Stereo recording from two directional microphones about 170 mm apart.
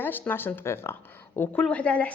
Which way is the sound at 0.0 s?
10° left (ahead or behind).